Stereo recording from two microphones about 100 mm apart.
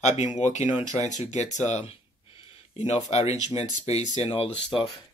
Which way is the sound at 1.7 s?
80° left.